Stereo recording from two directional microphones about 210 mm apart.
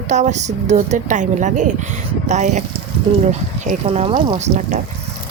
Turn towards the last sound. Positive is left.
turn(degrees=-35)  # may be behind; listen again after turning